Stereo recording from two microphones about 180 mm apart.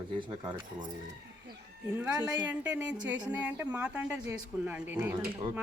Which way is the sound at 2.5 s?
10° right (ahead or behind).